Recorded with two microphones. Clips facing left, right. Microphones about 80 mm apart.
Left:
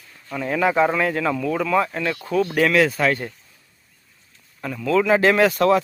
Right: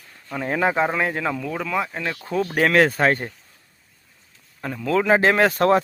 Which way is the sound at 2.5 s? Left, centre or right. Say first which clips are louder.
Right 2 dB; right.